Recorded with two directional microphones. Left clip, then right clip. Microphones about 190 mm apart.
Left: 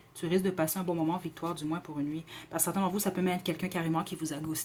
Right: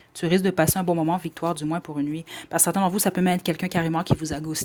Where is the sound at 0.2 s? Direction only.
40° right (ahead or behind).